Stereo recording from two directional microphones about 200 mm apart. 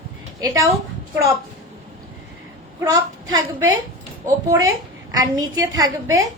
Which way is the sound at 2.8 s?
15° right (ahead or behind).